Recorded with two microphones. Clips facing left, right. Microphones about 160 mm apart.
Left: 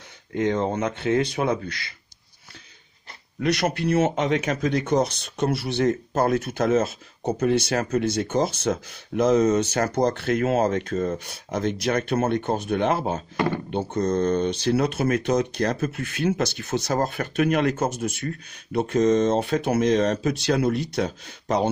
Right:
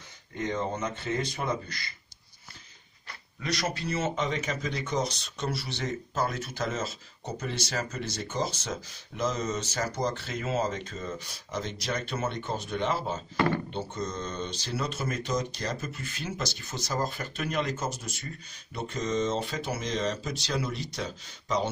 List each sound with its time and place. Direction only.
0.3 s a man's voice: 70° left (ahead or behind)
3.3 s speech: 60° left (ahead or behind)